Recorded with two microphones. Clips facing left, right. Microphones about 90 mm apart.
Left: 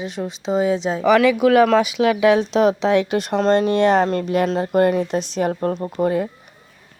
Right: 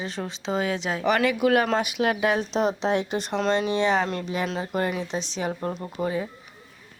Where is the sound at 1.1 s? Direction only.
90° left; by 6.3 s 50° left (ahead or behind).